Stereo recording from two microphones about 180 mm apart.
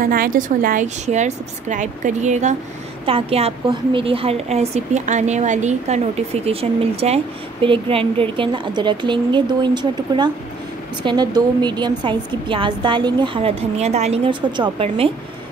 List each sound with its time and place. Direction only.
0.0 s a woman's voice: 55° right (ahead or behind); by 15.0 s 30° right (ahead or behind)